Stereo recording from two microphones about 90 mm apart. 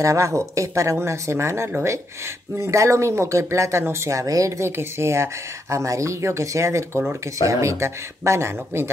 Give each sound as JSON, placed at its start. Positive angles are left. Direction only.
{"t": 0.0, "sound": "speech", "side_deg": -35}